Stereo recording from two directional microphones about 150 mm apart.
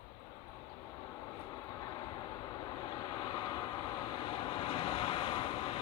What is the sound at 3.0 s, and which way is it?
Vehicle, 35° left (ahead or behind).